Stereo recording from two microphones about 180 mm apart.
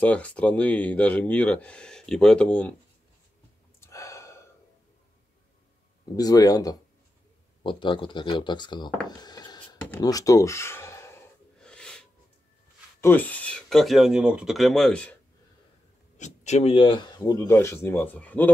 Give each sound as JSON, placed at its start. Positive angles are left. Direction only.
{"t": 0.0, "sound": "speech", "side_deg": 10}
{"t": 3.8, "sound": "gasp", "side_deg": 15}
{"t": 6.1, "sound": "speech", "side_deg": 20}
{"t": 9.2, "sound": "a sound", "side_deg": 20}
{"t": 9.9, "sound": "speech", "side_deg": 20}
{"t": 11.6, "sound": "a sound", "side_deg": 5}
{"t": 13.0, "sound": "speech", "side_deg": 10}
{"t": 16.2, "sound": "speech", "side_deg": 40}